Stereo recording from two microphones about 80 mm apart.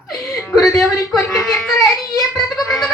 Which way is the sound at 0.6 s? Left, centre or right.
Centre.